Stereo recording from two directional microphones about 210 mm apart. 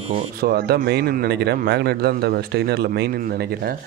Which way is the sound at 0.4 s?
50° right (ahead or behind).